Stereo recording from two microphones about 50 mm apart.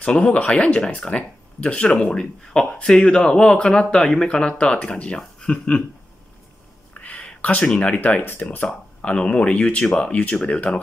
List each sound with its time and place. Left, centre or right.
0.0 s speech: left
6.9 s a sound: left
8.4 s speech: left
9.0 s speech: left